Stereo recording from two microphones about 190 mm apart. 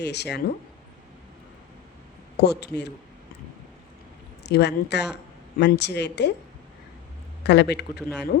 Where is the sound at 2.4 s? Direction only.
60° left (ahead or behind).